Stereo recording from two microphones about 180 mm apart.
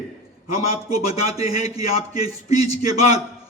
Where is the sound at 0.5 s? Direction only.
35° left (ahead or behind).